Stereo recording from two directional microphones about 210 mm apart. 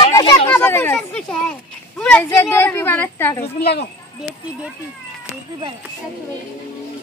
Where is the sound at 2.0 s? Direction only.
5° left (ahead or behind).